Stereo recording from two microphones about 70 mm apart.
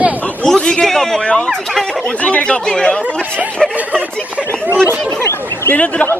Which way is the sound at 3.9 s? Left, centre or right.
Right.